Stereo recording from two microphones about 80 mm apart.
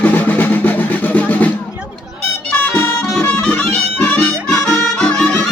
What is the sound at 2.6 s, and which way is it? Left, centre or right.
Music, left.